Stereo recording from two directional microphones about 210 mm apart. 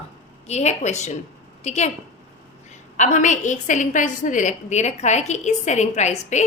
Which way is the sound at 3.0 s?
35° left (ahead or behind).